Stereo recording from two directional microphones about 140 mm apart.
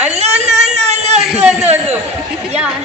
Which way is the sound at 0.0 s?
50° right (ahead or behind).